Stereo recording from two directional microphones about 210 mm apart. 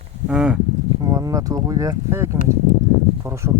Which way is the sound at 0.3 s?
5° right (ahead or behind).